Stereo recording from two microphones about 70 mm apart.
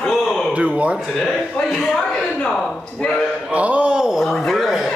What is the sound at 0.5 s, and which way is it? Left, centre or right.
Speech, centre.